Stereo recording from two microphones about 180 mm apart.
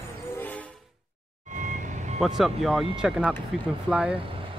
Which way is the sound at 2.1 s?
Centre (ahead or behind).